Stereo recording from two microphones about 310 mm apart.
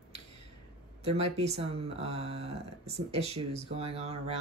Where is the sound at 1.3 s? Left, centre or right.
Centre.